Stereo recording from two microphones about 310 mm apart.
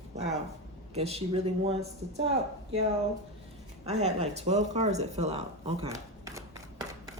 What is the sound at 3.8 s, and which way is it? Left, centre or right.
Speech, right.